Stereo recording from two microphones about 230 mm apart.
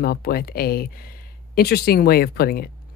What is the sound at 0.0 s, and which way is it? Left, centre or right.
Speech, left.